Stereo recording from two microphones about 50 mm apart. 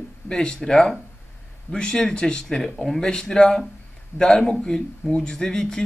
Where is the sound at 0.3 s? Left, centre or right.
Centre.